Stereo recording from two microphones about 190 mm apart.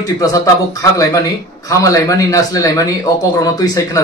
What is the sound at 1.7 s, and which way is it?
A man's voice, 15° left (ahead or behind).